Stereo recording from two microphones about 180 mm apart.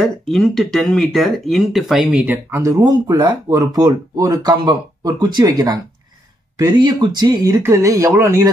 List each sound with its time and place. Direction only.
0.0 s speech: centre (ahead or behind); by 8.5 s 15° right (ahead or behind)